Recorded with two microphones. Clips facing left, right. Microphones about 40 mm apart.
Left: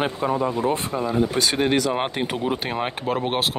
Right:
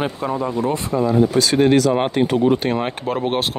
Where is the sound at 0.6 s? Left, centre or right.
Left.